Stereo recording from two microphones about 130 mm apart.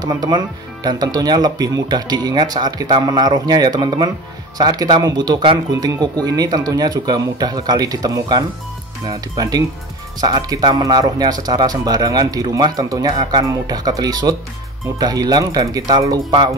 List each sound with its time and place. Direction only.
0.0 s speech: 30° right (ahead or behind)